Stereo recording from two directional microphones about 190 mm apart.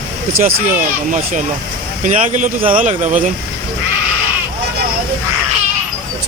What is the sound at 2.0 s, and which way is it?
Speech, 40° right (ahead or behind).